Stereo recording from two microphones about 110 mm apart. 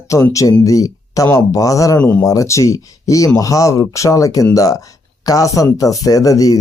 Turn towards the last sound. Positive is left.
turn(degrees=30)  # may be behind; listen again after turning